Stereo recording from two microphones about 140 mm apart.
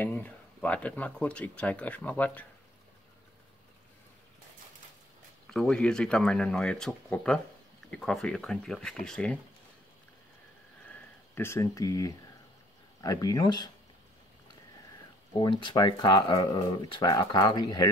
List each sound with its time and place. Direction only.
0.0 s speech: 10° left (ahead or behind)
5.5 s speech: 5° left (ahead or behind)
10.9 s a sound: 15° left (ahead or behind)
13.0 s speech: 25° left (ahead or behind)
15.3 s speech: 35° left (ahead or behind)